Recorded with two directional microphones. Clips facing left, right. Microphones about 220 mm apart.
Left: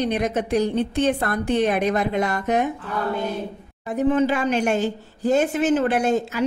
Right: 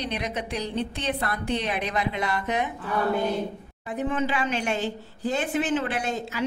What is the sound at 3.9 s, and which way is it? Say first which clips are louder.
A woman's voice: left 7 dB; 40° left (ahead or behind).